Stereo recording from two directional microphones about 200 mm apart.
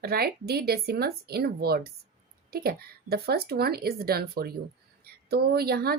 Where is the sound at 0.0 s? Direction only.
50° right (ahead or behind).